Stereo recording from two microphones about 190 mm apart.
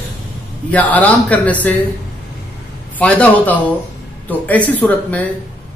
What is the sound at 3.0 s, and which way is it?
Speech, 10° left (ahead or behind).